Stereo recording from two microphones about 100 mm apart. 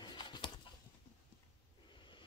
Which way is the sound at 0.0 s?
50° left (ahead or behind).